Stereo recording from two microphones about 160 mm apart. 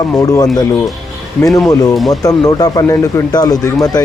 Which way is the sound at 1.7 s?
25° left (ahead or behind).